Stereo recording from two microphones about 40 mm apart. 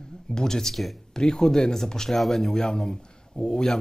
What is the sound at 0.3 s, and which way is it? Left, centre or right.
Speech, centre.